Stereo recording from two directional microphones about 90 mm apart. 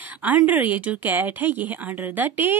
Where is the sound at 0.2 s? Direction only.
15° right (ahead or behind).